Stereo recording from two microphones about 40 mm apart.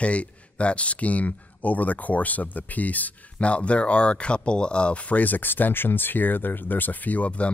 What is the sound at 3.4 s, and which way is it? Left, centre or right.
Speech, left.